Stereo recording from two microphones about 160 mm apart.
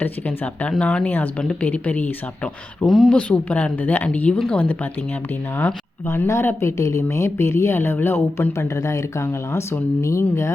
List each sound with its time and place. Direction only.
0.0 s speech: 10° left (ahead or behind)